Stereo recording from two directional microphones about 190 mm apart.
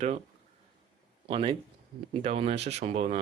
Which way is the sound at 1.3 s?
30° right (ahead or behind).